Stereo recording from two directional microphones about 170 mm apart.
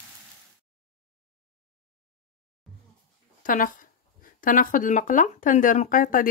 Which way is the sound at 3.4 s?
50° left (ahead or behind).